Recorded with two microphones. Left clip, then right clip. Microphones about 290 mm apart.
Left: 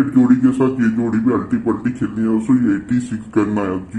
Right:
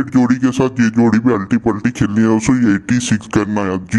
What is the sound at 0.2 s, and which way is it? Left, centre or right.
A man's voice, right.